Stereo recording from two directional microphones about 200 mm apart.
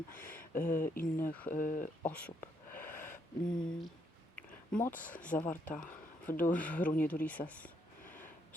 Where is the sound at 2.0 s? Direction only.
10° left (ahead or behind).